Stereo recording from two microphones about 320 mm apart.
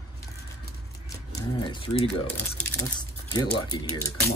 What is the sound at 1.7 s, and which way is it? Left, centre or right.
Speech, centre.